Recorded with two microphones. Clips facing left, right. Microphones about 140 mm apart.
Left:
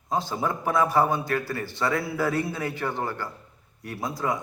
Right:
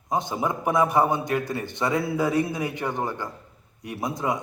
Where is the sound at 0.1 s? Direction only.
20° right (ahead or behind).